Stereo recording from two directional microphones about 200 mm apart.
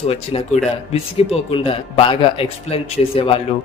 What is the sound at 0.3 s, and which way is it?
A man's voice, 30° left (ahead or behind).